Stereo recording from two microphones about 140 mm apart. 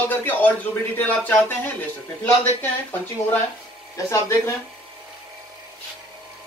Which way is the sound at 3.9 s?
20° left (ahead or behind).